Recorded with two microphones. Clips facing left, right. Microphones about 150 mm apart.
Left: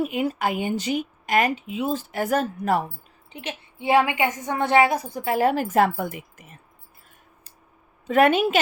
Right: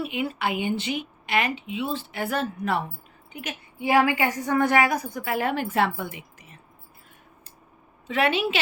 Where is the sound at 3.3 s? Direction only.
25° left (ahead or behind); by 6.6 s 45° left (ahead or behind).